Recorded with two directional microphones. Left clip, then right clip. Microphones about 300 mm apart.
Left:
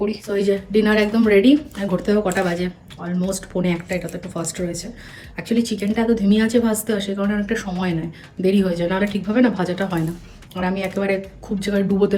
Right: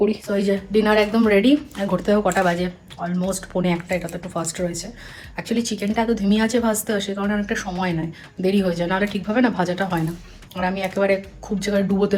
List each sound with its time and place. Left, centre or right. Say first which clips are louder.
0.1 s speech: left 2 dB; centre